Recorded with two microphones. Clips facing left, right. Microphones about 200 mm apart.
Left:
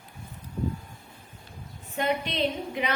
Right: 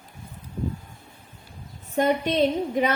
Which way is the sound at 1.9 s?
40° right (ahead or behind).